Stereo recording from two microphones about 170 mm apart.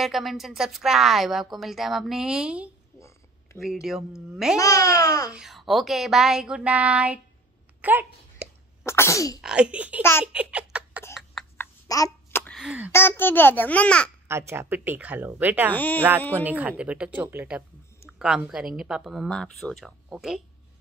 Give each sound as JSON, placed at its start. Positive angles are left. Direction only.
{"t": 0.0, "sound": "a woman's voice", "side_deg": 0}
{"t": 3.8, "sound": "a woman's voice", "side_deg": 0}
{"t": 4.6, "sound": "a child's voice", "side_deg": 20}
{"t": 5.3, "sound": "a woman's voice", "side_deg": 0}
{"t": 7.8, "sound": "a sound", "side_deg": -10}
{"t": 8.8, "sound": "a child's voice", "side_deg": 15}
{"t": 9.4, "sound": "a woman's voice", "side_deg": -5}
{"t": 10.2, "sound": "giggle", "side_deg": -5}
{"t": 11.5, "sound": "babbling", "side_deg": 15}
{"t": 12.5, "sound": "speech", "side_deg": -5}
{"t": 12.9, "sound": "a child's voice", "side_deg": 15}
{"t": 14.2, "sound": "a woman's voice", "side_deg": -15}
{"t": 15.7, "sound": "a child's voice", "side_deg": 10}
{"t": 16.3, "sound": "a woman's voice", "side_deg": -10}